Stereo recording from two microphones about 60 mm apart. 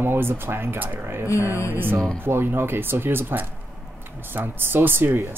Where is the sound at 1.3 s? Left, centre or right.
Left.